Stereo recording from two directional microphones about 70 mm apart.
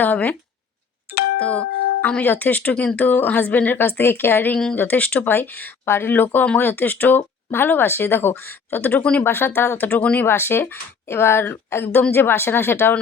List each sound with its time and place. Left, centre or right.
0.0 s speech: left
1.4 s speech: centre
10.2 s speech: left